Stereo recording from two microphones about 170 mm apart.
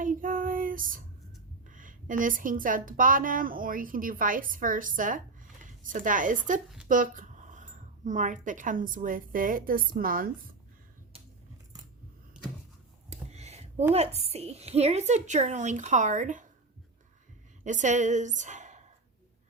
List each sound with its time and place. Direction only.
0.0 s child singing: 55° right (ahead or behind)
1.6 s a woman's voice: 50° right (ahead or behind)
12.4 s a sound: 5° right (ahead or behind)
13.1 s a sound: 40° right (ahead or behind)
13.9 s a woman's voice: 35° right (ahead or behind)
17.6 s a woman's voice: 45° right (ahead or behind)